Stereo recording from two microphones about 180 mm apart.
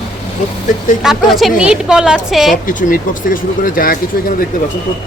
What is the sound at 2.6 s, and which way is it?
Speech, 50° left (ahead or behind).